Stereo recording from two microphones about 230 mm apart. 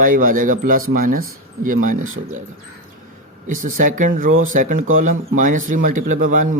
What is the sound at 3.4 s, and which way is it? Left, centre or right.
Speech, right.